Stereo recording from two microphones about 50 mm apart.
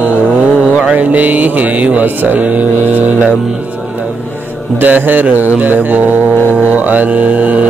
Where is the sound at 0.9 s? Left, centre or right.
Right.